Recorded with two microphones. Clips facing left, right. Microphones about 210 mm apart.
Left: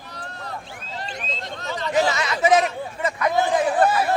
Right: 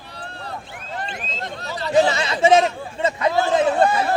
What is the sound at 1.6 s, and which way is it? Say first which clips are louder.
Chatter: right 4 dB; 35° right (ahead or behind).